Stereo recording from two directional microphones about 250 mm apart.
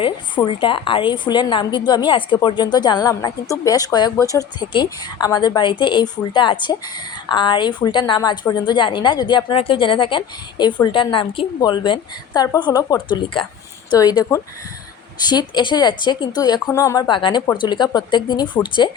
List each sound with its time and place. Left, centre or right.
0.0 s a woman's voice: centre